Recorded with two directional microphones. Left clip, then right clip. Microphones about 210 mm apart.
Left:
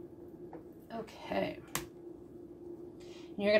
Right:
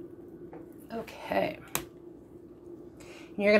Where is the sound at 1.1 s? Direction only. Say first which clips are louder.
Right 6 dB; 30° right (ahead or behind).